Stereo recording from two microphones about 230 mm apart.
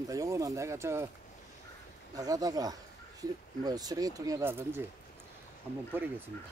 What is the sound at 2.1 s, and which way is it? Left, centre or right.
Speech, centre.